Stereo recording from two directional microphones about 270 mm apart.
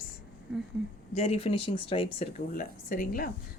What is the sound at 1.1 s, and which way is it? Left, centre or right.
Speech, left.